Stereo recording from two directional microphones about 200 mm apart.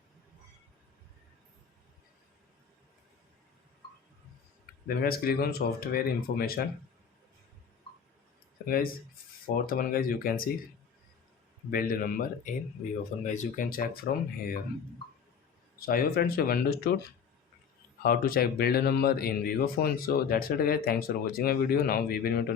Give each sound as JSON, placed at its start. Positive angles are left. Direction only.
{"t": 4.9, "sound": "speech", "side_deg": 50}
{"t": 9.6, "sound": "speech", "side_deg": 45}
{"t": 11.7, "sound": "speech", "side_deg": 45}
{"t": 15.9, "sound": "speech", "side_deg": 50}
{"t": 18.0, "sound": "speech", "side_deg": 45}